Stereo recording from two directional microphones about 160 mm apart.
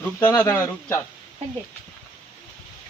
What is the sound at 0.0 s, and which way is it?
Speech, 15° left (ahead or behind).